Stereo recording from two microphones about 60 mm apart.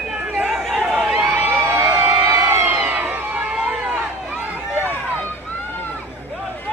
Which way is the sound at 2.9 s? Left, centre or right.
Right.